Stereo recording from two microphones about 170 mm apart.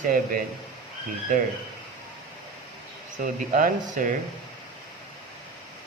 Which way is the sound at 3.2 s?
50° right (ahead or behind).